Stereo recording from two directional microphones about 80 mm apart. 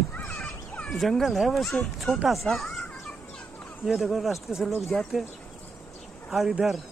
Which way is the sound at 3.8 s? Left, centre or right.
Centre.